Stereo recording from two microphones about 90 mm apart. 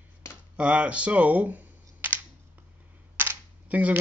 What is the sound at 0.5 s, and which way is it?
Speech, 10° right (ahead or behind).